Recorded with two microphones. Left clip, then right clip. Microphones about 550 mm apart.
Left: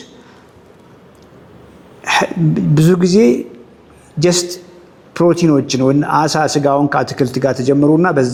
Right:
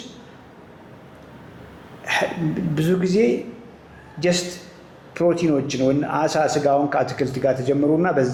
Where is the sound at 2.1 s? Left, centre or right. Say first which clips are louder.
Left 8 dB; left.